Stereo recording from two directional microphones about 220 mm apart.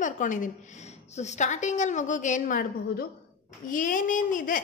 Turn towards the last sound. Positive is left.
turn(degrees=40)  # may be behind; listen again after turning